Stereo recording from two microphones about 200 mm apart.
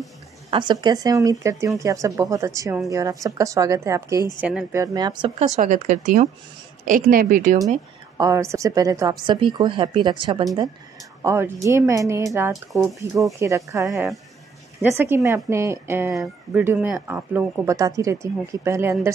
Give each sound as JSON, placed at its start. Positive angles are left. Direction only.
{"t": 0.5, "sound": "a woman's voice", "side_deg": -20}
{"t": 4.8, "sound": "a woman's voice", "side_deg": -20}
{"t": 5.6, "sound": "speech", "side_deg": -35}
{"t": 8.2, "sound": "a woman's voice", "side_deg": -15}
{"t": 13.8, "sound": "speech", "side_deg": 0}
{"t": 14.8, "sound": "speech", "side_deg": -10}
{"t": 16.1, "sound": "speech", "side_deg": 0}